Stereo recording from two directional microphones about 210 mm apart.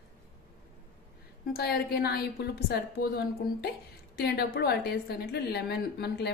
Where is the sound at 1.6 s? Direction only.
50° left (ahead or behind).